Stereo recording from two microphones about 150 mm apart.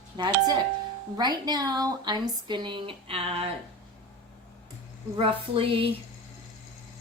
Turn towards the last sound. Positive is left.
turn(degrees=-35)  # may be behind; listen again after turning